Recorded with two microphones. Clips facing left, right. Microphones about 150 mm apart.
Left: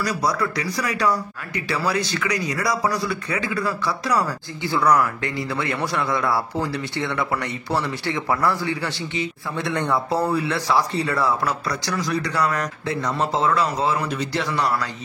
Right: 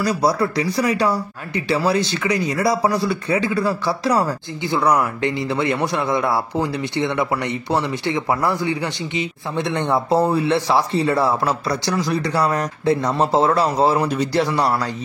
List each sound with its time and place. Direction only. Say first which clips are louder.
0.0 s speech: right 4 dB; 30° right (ahead or behind)